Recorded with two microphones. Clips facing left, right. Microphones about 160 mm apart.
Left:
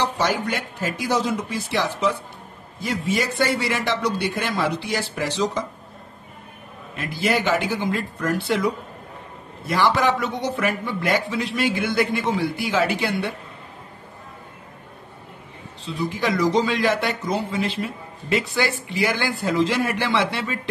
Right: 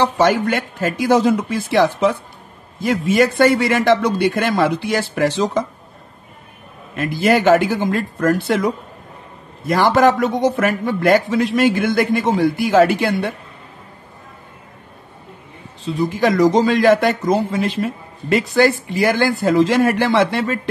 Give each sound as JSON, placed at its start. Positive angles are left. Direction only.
{"t": 0.0, "sound": "a man's voice", "side_deg": -55}
{"t": 7.0, "sound": "a man's voice", "side_deg": -50}
{"t": 15.8, "sound": "a man's voice", "side_deg": -45}